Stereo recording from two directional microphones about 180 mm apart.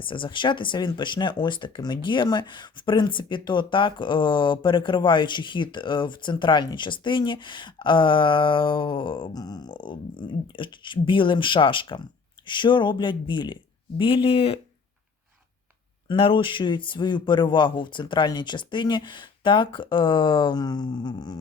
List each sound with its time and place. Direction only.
0.0 s speech: 30° left (ahead or behind)
16.0 s speech: 30° left (ahead or behind)